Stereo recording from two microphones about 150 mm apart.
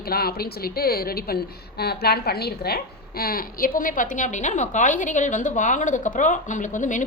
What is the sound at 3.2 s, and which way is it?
A woman's voice, 75° left (ahead or behind).